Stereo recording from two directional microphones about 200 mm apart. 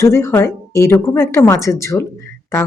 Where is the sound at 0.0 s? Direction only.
15° left (ahead or behind).